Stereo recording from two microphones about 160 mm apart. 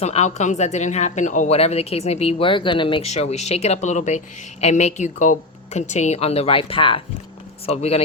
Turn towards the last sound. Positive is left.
turn(degrees=40)  # may be behind; listen again after turning